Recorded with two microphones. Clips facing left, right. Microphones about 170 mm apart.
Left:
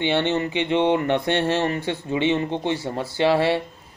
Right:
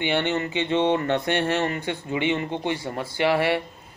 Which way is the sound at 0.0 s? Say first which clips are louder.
Left 3 dB; 25° left (ahead or behind).